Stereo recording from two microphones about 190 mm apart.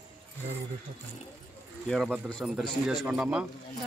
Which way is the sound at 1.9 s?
Centre (ahead or behind).